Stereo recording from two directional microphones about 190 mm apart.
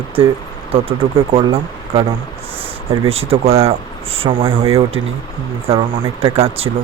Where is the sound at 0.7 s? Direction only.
30° right (ahead or behind).